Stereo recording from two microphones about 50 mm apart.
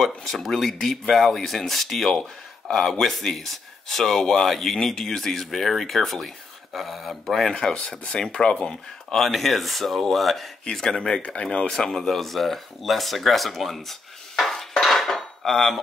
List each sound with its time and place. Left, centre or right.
0.2 s speech: centre
7.5 s speech: left
9.1 s speech: centre
10.6 s speech: centre